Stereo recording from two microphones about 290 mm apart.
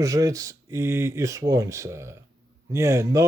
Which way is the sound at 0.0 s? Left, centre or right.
Centre.